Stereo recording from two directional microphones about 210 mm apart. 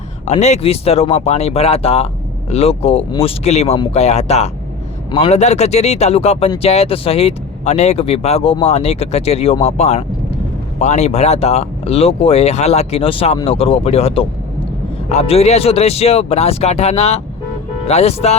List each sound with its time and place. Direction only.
0.3 s speech: 30° left (ahead or behind)